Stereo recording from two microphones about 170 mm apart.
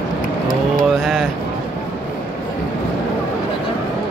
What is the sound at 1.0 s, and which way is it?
Speech, centre (ahead or behind).